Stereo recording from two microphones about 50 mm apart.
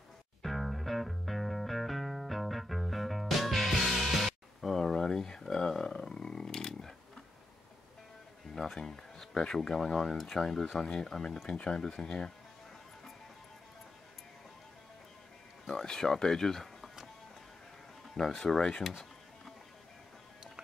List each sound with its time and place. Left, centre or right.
0.4 s music: centre
8.5 s speech: centre
15.6 s speech: centre
18.1 s speech: centre